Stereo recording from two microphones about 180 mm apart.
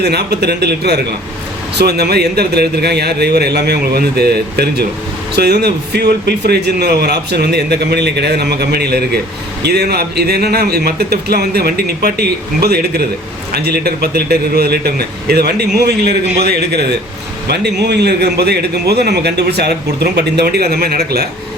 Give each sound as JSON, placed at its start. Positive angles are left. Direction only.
{"t": 0.0, "sound": "a man's voice", "side_deg": -65}